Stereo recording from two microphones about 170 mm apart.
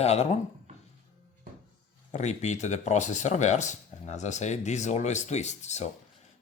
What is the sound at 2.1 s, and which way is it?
Speech, 40° left (ahead or behind).